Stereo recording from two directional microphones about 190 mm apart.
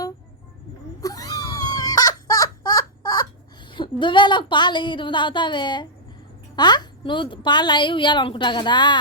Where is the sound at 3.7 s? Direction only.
25° left (ahead or behind).